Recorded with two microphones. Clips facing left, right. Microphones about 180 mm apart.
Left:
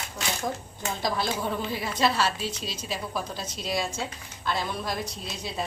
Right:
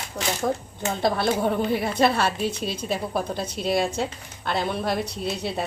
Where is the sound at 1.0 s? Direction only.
60° right (ahead or behind).